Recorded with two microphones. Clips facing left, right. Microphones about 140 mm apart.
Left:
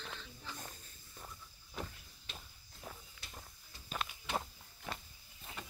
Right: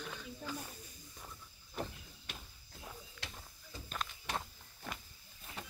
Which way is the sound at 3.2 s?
90° right.